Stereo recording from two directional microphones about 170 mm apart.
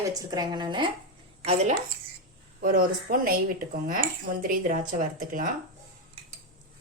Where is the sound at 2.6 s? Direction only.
55° right (ahead or behind).